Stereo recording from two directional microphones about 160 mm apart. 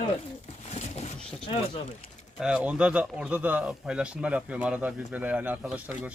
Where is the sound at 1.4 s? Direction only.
35° left (ahead or behind).